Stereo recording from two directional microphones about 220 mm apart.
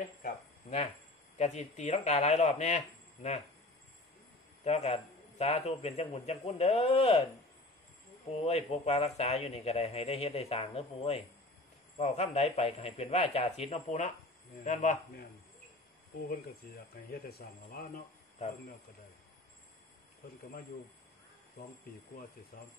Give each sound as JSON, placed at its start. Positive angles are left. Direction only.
{"t": 0.2, "sound": "a sound", "side_deg": 30}
{"t": 1.4, "sound": "speech", "side_deg": 30}
{"t": 4.6, "sound": "speech", "side_deg": 30}
{"t": 8.3, "sound": "speech", "side_deg": 30}